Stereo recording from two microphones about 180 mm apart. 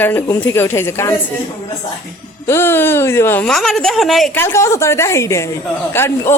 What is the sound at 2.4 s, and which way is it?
A woman's voice, 15° left (ahead or behind).